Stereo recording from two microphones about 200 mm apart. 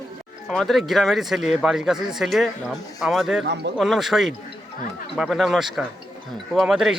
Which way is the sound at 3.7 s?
Centre (ahead or behind).